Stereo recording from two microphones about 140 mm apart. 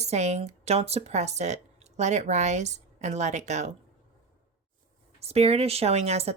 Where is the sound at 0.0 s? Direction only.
50° right (ahead or behind).